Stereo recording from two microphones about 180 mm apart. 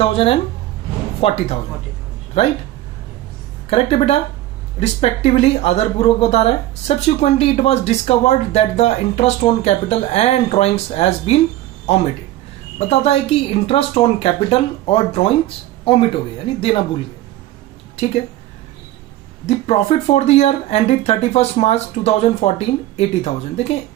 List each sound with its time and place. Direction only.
0.0 s speech: 35° left (ahead or behind)
3.7 s speech: 35° left (ahead or behind)
19.5 s speech: 35° left (ahead or behind)